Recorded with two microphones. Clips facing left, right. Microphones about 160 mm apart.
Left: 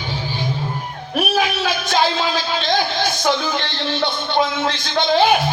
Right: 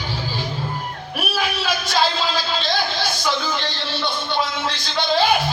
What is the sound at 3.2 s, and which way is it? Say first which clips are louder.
Music: left 4 dB; 55° left (ahead or behind).